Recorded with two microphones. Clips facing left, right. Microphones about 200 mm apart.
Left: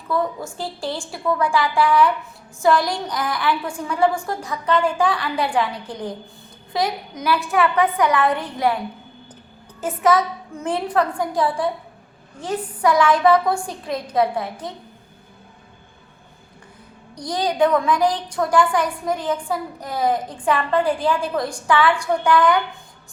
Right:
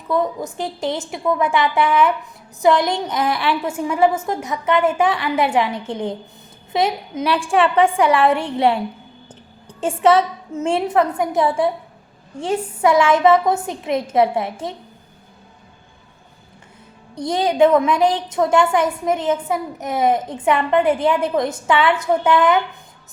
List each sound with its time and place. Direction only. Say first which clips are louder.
0.1 s a woman's voice: right 3 dB; 20° right (ahead or behind)
9.8 s a woman's voice: right 3 dB; 30° right (ahead or behind)
17.2 s a woman's voice: right 4 dB; 25° right (ahead or behind)